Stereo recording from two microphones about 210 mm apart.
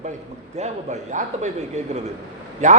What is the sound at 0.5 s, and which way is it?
A man's voice, 35° right (ahead or behind).